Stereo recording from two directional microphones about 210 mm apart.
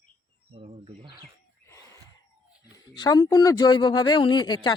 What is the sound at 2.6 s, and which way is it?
A man's voice, 20° left (ahead or behind).